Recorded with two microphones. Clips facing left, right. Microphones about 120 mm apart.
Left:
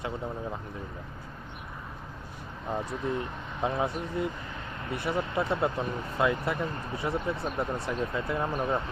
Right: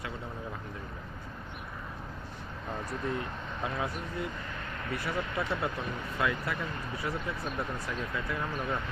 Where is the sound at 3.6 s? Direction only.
25° left (ahead or behind).